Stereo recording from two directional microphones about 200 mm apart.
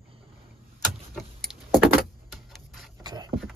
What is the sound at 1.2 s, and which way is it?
Vehicle, centre (ahead or behind).